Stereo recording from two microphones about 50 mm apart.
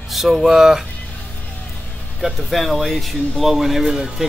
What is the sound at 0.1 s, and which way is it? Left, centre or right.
Speech, centre.